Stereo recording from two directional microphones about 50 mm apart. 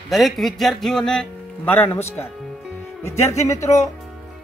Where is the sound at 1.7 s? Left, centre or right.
Left.